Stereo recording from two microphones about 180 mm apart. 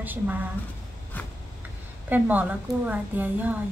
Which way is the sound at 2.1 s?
10° right (ahead or behind).